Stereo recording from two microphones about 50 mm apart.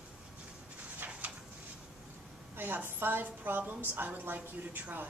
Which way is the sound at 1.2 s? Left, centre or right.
Right.